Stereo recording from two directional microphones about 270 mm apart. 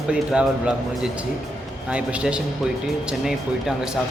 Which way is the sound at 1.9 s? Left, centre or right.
Centre.